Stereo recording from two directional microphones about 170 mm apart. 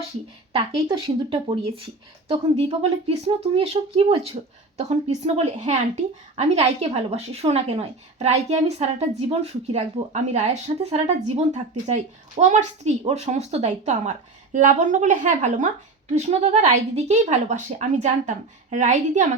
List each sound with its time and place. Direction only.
0.5 s a woman's voice: 30° right (ahead or behind)